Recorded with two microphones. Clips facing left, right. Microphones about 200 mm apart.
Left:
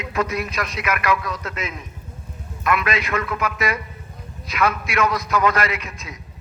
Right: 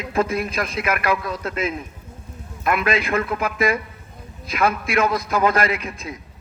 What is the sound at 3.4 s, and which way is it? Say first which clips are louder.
Speech: right 3 dB; 50° right (ahead or behind).